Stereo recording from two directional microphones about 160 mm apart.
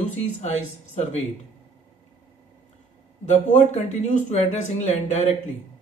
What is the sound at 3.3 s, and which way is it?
Speech, 45° left (ahead or behind).